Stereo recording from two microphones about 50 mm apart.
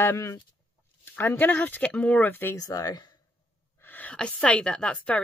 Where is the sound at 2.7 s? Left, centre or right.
Left.